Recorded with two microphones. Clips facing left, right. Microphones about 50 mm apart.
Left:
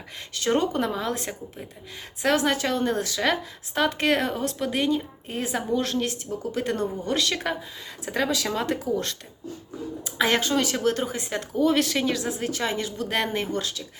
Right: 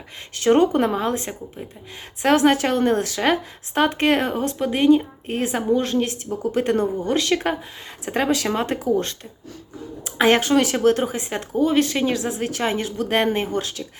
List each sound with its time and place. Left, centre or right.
0.3 s speech: right
2.2 s speech: right
5.7 s a woman's voice: right
6.4 s speech: right
7.1 s a woman's voice: right
7.4 s speech: right
10.0 s speech: right
11.6 s speech: centre
12.0 s speech: right